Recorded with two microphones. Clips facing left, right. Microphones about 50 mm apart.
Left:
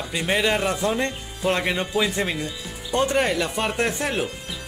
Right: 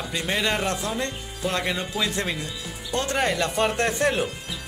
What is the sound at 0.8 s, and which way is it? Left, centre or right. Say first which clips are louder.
Speech: left 5 dB; left.